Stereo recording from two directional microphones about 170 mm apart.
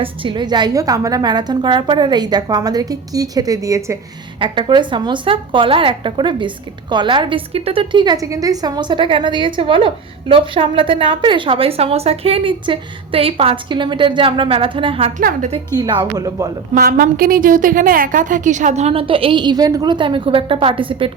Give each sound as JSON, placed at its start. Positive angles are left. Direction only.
{"t": 0.0, "sound": "a woman's voice", "side_deg": -30}
{"t": 4.4, "sound": "a woman's voice", "side_deg": -30}
{"t": 15.2, "sound": "a woman's voice", "side_deg": -60}
{"t": 15.7, "sound": "a woman's voice", "side_deg": -25}
{"t": 16.7, "sound": "a woman's voice", "side_deg": -60}